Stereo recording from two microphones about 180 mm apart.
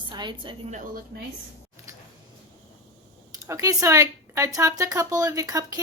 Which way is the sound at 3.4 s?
15° right (ahead or behind).